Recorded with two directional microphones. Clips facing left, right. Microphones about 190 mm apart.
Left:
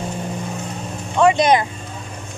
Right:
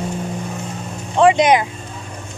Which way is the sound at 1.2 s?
15° right (ahead or behind).